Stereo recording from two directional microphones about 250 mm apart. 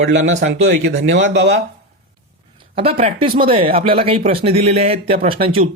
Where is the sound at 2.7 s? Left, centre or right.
Right.